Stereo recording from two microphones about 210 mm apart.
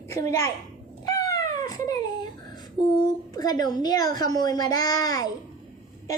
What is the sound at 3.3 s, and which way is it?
A child's voice, 20° left (ahead or behind).